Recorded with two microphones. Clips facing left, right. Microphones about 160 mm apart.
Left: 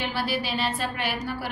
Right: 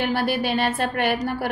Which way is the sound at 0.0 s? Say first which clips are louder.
Right 6 dB; 55° right (ahead or behind).